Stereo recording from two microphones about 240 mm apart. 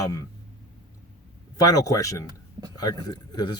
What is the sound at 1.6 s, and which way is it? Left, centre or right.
Speech, centre.